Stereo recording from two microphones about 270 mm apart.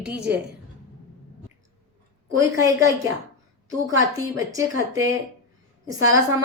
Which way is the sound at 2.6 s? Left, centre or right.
Centre.